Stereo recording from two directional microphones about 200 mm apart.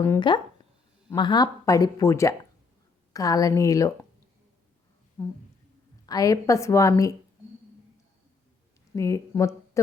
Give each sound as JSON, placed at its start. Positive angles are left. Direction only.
{"t": 0.0, "sound": "speech", "side_deg": 15}
{"t": 5.2, "sound": "speech", "side_deg": 10}
{"t": 9.0, "sound": "speech", "side_deg": 15}